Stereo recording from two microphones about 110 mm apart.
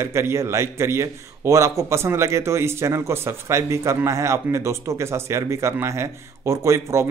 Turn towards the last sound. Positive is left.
turn(degrees=-25)  # may be behind; listen again after turning